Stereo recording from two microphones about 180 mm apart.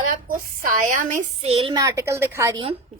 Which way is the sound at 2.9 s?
40° right (ahead or behind).